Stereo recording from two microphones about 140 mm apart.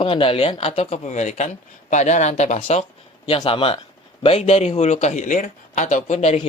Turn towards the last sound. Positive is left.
turn(degrees=55)  # may be behind; listen again after turning